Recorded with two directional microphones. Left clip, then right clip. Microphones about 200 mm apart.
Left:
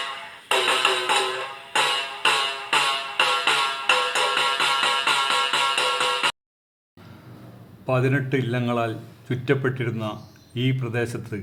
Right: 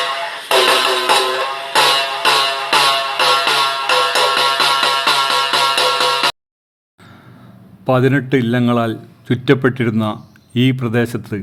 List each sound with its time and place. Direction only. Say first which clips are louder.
0.0 s music: right 12 dB; 50° right (ahead or behind)
7.9 s a man's voice: right 9 dB; 40° right (ahead or behind)